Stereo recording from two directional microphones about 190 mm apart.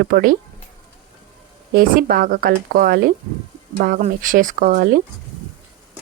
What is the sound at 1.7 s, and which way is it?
Speech, 50° right (ahead or behind).